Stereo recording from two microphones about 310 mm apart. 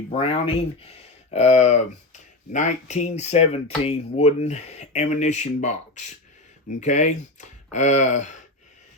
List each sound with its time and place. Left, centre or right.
0.1 s speech: centre